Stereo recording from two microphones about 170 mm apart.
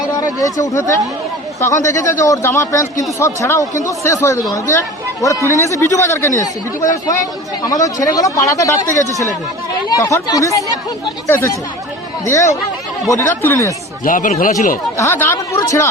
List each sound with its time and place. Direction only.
0.2 s speech: 20° left (ahead or behind)
8.0 s speech: 20° left (ahead or behind)
9.9 s speech: 20° left (ahead or behind)
14.0 s speech: 50° left (ahead or behind)
14.9 s speech: 15° left (ahead or behind)